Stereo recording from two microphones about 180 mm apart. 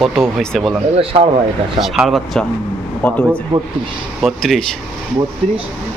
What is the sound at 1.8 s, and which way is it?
Speech, centre (ahead or behind).